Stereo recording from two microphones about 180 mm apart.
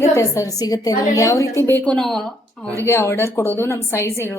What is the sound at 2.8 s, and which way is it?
A woman's voice, 15° left (ahead or behind).